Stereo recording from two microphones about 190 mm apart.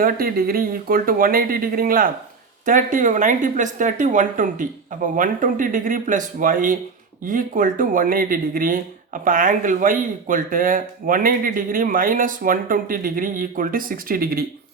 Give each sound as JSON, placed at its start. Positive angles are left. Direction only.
{"t": 0.0, "sound": "speech", "side_deg": -50}